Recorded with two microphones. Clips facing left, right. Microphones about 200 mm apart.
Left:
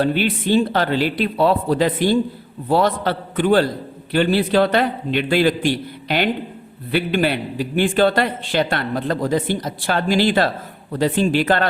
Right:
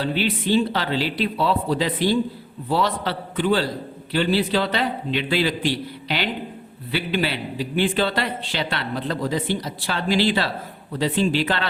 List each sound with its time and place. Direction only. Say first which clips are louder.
0.0 s a man's voice: left 4 dB; 55° left (ahead or behind)